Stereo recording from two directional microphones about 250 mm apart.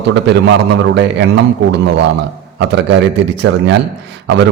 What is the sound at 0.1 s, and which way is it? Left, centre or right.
Speech, right.